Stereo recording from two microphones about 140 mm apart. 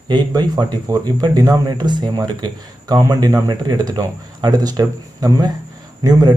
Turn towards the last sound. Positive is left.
turn(degrees=-30)  # may be behind; listen again after turning